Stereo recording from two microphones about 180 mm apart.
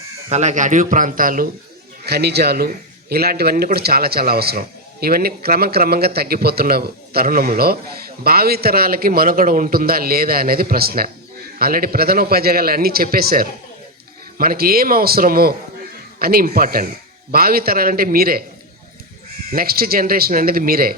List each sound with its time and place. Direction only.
0.3 s speech: 40° right (ahead or behind)
2.0 s a man's voice: 65° right (ahead or behind)
19.5 s a man's voice: 55° right (ahead or behind)